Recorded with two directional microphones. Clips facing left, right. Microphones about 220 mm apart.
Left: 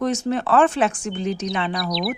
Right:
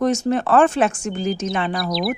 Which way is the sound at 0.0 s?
45° right (ahead or behind).